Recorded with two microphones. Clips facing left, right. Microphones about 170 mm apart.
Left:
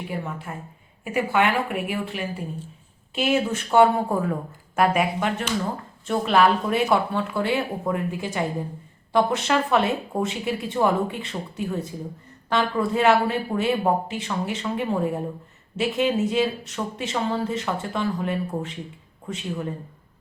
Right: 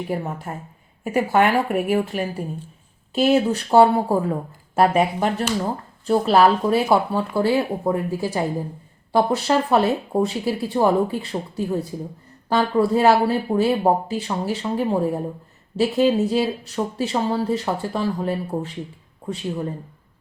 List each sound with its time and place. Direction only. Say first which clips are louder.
0.1 s speech: right 4 dB; 40° right (ahead or behind)